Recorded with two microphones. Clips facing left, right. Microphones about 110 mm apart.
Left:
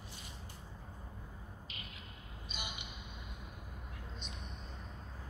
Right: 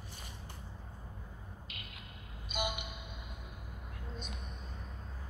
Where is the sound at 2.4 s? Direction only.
50° right (ahead or behind).